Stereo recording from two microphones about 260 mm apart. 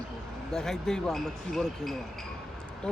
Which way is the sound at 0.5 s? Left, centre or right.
Centre.